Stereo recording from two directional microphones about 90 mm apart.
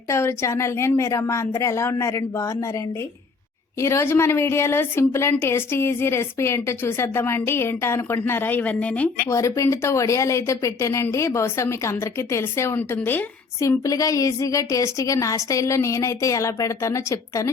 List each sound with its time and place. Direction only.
0.1 s a woman's voice: 30° left (ahead or behind); by 9.0 s 15° left (ahead or behind)
9.3 s a woman's voice: 35° left (ahead or behind)
13.6 s a woman's voice: 40° left (ahead or behind)